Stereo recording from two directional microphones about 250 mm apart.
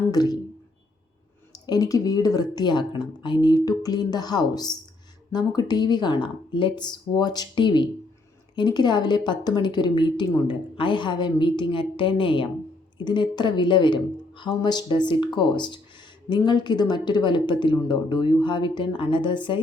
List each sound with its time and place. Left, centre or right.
0.1 s a woman's voice: centre
1.5 s a woman's voice: centre